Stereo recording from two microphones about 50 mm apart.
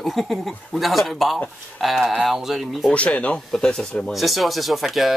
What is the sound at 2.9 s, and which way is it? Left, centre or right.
Speech, left.